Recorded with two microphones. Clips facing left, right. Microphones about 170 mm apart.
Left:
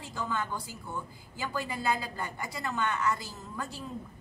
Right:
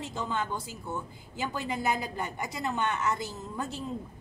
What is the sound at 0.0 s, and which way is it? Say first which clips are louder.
A woman's voice: right 2 dB; 20° right (ahead or behind).